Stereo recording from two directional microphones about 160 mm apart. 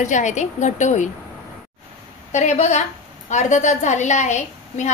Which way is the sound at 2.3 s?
45° left (ahead or behind).